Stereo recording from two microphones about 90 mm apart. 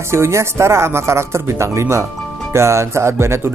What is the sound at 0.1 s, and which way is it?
Speech, 30° right (ahead or behind).